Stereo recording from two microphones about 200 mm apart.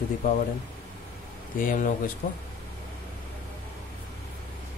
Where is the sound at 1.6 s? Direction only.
40° left (ahead or behind).